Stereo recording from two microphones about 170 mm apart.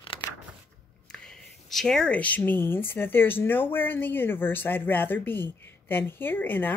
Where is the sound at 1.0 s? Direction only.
5° left (ahead or behind).